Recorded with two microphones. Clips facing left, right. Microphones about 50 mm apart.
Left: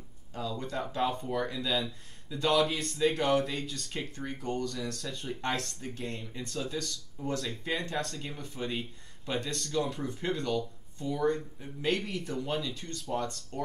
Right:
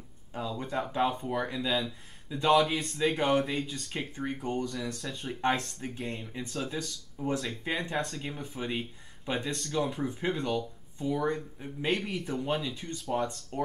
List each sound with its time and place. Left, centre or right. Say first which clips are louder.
0.3 s speech: right 1 dB; centre
2.5 s speech: right 3 dB; centre; by 13.6 s right